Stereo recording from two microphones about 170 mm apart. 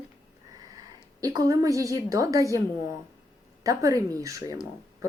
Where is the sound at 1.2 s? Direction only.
20° right (ahead or behind).